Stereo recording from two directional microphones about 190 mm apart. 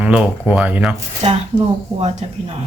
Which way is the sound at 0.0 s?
5° right (ahead or behind).